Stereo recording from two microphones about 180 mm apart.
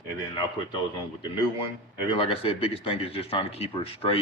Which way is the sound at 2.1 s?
30° left (ahead or behind).